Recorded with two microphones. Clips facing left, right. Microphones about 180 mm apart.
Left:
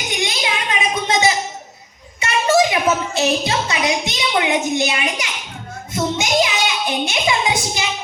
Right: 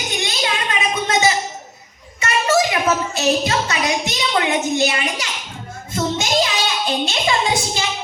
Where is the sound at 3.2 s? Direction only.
20° left (ahead or behind).